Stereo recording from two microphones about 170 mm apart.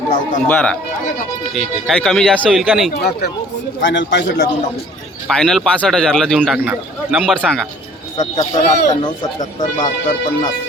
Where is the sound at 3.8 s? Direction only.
90° left.